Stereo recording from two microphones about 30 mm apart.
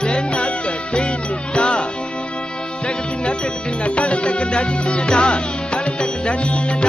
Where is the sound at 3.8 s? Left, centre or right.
Left.